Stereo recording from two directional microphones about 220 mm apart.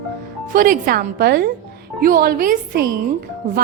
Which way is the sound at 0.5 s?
40° right (ahead or behind).